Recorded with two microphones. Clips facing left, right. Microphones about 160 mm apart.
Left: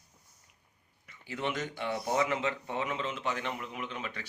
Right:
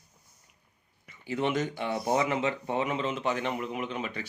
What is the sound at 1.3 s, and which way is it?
A man's voice, 20° right (ahead or behind).